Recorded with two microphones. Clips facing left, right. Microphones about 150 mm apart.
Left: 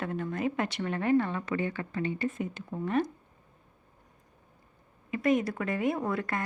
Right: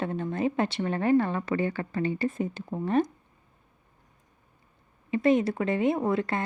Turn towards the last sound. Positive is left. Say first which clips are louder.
# right 5 dB
turn(degrees=-25)  # may be behind; listen again after turning